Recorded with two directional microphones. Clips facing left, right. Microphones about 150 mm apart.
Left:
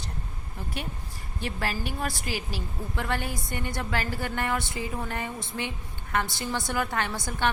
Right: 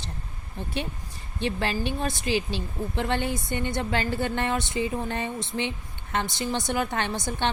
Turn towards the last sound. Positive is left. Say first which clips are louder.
# right 2 dB
turn(degrees=-25)  # may be behind; listen again after turning